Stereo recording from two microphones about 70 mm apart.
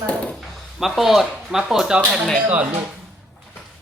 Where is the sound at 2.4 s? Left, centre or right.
Right.